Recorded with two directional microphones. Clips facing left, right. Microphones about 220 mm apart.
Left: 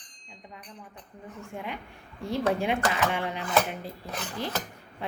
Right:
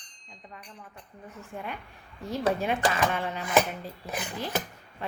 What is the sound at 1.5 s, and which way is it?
A woman's voice, 15° left (ahead or behind).